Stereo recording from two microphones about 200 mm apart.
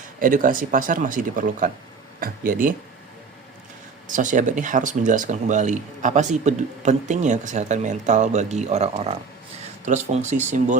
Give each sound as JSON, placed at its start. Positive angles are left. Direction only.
{"t": 0.2, "sound": "speech", "side_deg": -45}
{"t": 4.1, "sound": "speech", "side_deg": -40}